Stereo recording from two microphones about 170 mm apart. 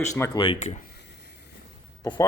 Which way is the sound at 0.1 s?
20° left (ahead or behind).